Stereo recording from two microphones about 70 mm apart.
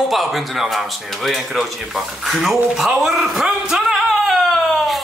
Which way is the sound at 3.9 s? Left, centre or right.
Centre.